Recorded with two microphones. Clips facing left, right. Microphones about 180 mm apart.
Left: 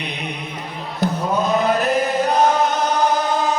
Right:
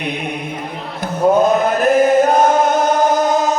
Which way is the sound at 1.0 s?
50° right (ahead or behind).